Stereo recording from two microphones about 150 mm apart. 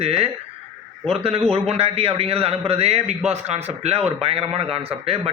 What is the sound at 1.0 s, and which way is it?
A man's voice, 40° right (ahead or behind).